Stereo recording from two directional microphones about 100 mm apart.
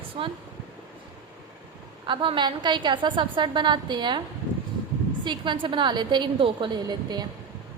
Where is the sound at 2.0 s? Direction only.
55° right (ahead or behind).